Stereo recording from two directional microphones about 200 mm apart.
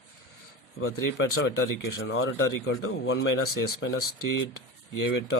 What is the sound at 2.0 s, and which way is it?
Speech, 75° left (ahead or behind).